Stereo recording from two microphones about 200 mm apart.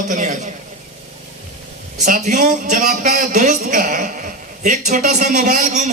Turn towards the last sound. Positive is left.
turn(degrees=-40)  # may be behind; listen again after turning